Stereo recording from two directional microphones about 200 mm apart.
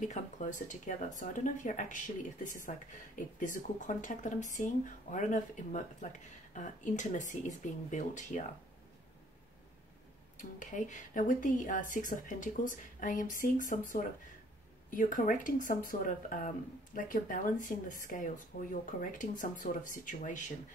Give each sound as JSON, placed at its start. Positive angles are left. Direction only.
{"t": 0.1, "sound": "speech", "side_deg": 40}
{"t": 10.3, "sound": "speech", "side_deg": 40}